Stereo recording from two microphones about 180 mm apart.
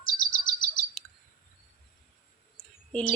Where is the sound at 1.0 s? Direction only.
Centre (ahead or behind).